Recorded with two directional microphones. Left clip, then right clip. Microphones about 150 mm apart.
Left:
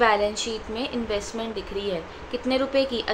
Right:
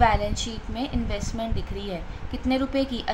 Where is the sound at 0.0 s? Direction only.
30° right (ahead or behind).